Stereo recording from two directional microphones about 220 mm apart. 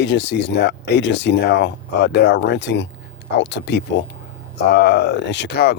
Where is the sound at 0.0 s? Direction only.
55° left (ahead or behind).